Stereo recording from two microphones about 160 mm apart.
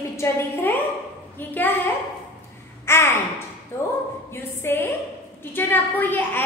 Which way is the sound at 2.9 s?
15° left (ahead or behind).